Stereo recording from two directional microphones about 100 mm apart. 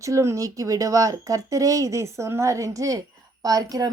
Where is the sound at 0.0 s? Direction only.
30° right (ahead or behind).